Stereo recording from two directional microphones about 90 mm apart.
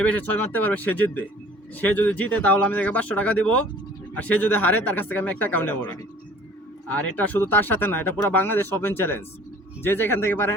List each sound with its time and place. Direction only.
0.0 s speech: 20° left (ahead or behind)
6.8 s speech: 20° left (ahead or behind)